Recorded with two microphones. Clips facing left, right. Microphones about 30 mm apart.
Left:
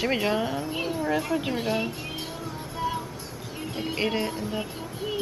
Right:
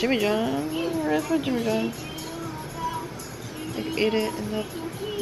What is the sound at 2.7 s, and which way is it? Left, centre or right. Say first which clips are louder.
Music: left 2 dB; left.